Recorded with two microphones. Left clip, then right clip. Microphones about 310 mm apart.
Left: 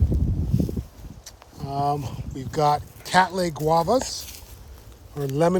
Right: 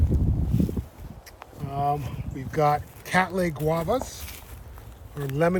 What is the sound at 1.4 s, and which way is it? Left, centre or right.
Speech, centre.